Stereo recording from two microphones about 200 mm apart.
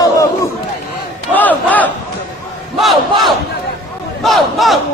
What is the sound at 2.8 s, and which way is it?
Crowd, centre (ahead or behind).